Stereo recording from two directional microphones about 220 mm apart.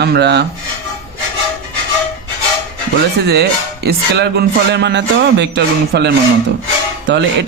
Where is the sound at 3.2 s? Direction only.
50° right (ahead or behind).